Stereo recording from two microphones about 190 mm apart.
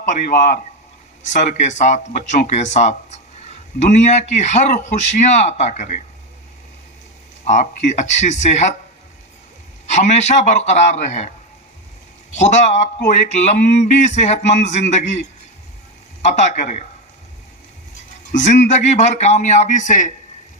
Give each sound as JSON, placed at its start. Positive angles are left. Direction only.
{"t": 0.0, "sound": "speech", "side_deg": 40}
{"t": 7.4, "sound": "speech", "side_deg": 40}
{"t": 9.9, "sound": "speech", "side_deg": 35}
{"t": 12.4, "sound": "speech", "side_deg": 40}
{"t": 16.2, "sound": "speech", "side_deg": 40}
{"t": 18.3, "sound": "speech", "side_deg": 40}